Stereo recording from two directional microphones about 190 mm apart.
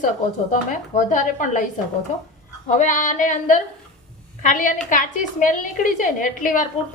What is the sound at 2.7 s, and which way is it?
A woman's voice, 40° left (ahead or behind).